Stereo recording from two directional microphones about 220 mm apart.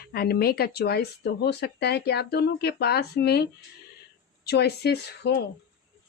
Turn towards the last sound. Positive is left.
turn(degrees=50)  # may be behind; listen again after turning